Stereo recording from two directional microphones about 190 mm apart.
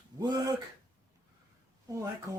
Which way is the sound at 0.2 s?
20° right (ahead or behind).